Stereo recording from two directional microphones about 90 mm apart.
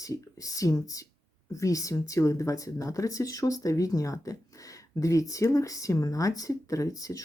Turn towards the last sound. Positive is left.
turn(degrees=40)  # may be behind; listen again after turning